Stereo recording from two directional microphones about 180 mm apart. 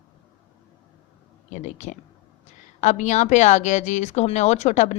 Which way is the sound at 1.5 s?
40° left (ahead or behind).